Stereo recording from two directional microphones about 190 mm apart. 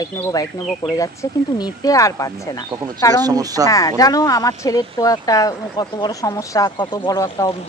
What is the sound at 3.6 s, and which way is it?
Speech, 15° left (ahead or behind).